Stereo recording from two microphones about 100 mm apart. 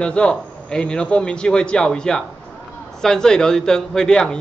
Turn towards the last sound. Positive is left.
turn(degrees=5)  # may be behind; listen again after turning